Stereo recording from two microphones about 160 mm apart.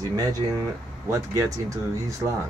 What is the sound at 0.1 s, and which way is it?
Speech, 25° right (ahead or behind).